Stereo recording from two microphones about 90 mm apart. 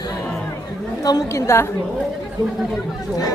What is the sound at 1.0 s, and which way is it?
Speech, 40° left (ahead or behind).